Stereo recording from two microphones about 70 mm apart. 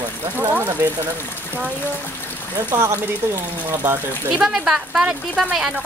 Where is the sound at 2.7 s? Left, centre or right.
Right.